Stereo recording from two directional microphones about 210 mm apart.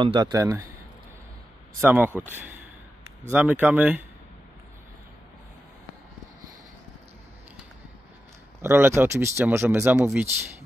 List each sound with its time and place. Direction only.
0.0 s speech: 20° right (ahead or behind)
1.8 s speech: 10° right (ahead or behind)
8.6 s speech: 10° right (ahead or behind)